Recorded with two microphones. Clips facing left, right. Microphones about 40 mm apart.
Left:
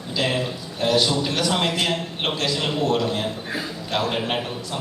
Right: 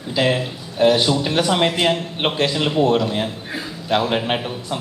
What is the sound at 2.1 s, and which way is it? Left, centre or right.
Mantra, right.